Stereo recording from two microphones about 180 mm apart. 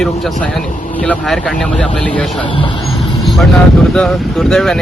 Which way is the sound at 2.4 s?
30° left (ahead or behind).